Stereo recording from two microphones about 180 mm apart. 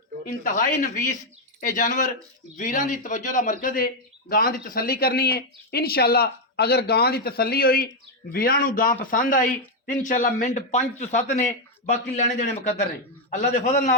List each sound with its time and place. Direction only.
0.3 s a man's voice: 45° left (ahead or behind)